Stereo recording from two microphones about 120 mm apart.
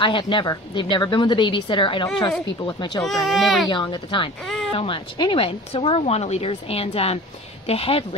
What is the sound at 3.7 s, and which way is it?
A woman's voice, 40° left (ahead or behind).